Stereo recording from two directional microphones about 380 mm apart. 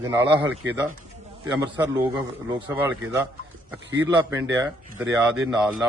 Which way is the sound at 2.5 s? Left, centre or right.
Centre.